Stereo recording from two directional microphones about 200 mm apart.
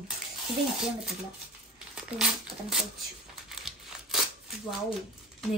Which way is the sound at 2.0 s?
5° right (ahead or behind).